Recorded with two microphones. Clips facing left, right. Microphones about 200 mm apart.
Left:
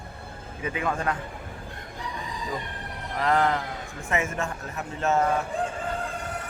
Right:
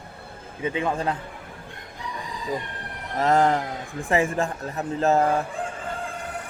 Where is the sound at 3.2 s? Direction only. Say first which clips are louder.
Right 4 dB; 45° right (ahead or behind).